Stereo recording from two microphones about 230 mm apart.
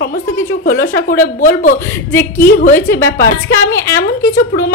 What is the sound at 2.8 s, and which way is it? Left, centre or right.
A woman's voice, centre.